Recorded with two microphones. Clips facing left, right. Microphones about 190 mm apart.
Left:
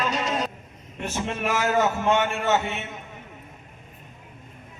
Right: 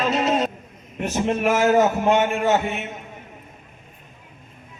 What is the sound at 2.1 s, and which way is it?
Speech, 15° right (ahead or behind).